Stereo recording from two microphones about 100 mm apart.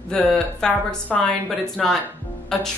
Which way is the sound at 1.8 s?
Centre (ahead or behind).